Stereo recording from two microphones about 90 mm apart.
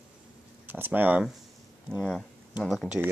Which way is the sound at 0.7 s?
20° right (ahead or behind).